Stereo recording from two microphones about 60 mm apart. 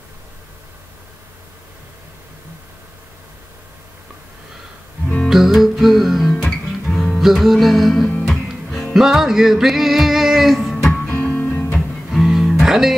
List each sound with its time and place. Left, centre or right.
5.0 s music: left
5.3 s music: centre
10.9 s music: left
12.1 s music: centre